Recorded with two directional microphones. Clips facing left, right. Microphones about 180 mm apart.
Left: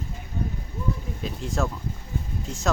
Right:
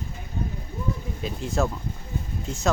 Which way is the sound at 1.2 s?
Centre (ahead or behind).